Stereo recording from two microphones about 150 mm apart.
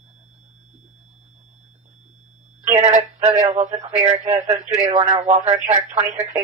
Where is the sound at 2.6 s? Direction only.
50° right (ahead or behind).